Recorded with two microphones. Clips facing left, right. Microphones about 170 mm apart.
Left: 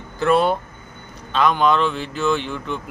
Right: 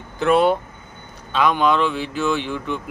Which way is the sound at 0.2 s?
15° right (ahead or behind).